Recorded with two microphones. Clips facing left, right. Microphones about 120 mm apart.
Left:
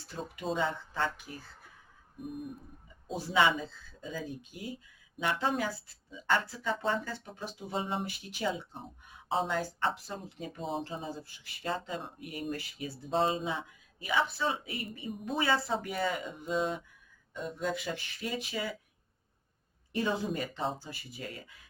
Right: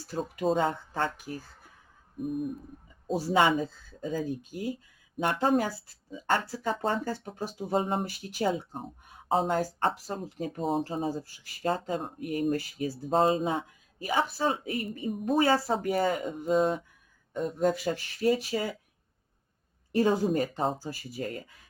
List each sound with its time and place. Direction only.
0.1 s speech: 40° right (ahead or behind)
3.1 s speech: 40° right (ahead or behind)
19.9 s speech: 40° right (ahead or behind)